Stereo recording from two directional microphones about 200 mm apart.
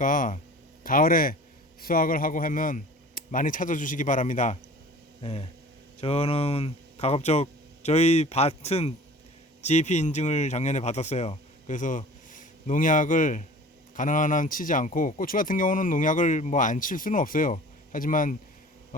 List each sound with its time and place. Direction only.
0.0 s speech: 40° left (ahead or behind)